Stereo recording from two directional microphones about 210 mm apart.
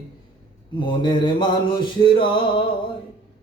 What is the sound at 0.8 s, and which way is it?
Music, 20° left (ahead or behind).